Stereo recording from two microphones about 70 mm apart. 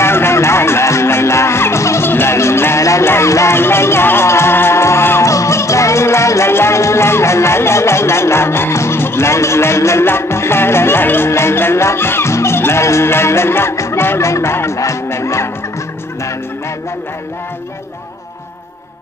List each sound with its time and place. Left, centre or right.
0.0 s music: left